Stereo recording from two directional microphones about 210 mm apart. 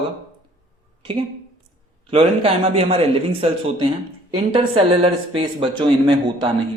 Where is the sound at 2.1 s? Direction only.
30° right (ahead or behind).